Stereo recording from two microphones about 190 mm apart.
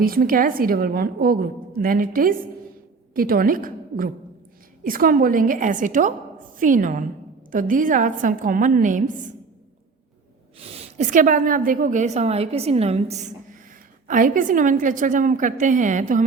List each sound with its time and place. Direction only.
0.0 s a woman's voice: 50° right (ahead or behind)
10.7 s a woman's voice: 35° right (ahead or behind)